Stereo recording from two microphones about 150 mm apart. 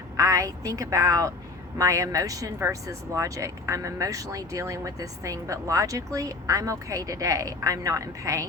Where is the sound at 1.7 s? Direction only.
20° right (ahead or behind).